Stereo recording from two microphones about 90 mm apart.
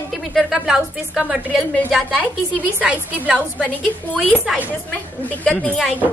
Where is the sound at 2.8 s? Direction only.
15° right (ahead or behind).